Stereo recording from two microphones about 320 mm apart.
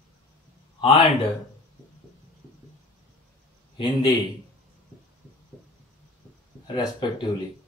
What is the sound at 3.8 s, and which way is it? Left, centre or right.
Speech, centre.